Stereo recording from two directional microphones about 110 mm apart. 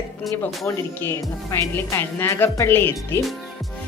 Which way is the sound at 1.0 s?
20° left (ahead or behind).